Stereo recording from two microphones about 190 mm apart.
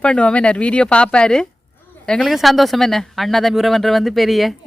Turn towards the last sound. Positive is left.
turn(degrees=0)  # may be behind; listen again after turning